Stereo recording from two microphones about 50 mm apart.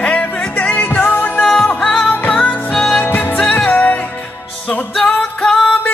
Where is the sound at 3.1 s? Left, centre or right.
Left.